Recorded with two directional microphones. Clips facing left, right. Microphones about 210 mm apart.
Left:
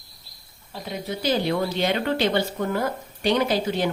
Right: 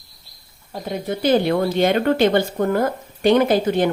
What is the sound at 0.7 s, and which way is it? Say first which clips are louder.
Speech: right 5 dB; 50° right (ahead or behind).